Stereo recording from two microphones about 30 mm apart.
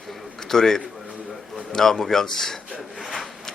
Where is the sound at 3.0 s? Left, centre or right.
Centre.